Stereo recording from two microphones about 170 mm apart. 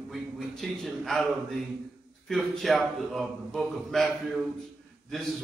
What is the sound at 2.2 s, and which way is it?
A man's voice, centre (ahead or behind).